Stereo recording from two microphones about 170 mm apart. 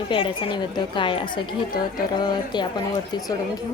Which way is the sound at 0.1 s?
30° left (ahead or behind).